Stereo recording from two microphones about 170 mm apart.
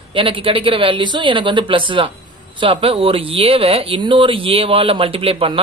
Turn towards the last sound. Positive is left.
turn(degrees=-35)  # may be behind; listen again after turning